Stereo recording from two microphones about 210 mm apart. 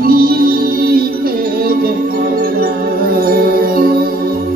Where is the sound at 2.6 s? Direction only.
45° right (ahead or behind).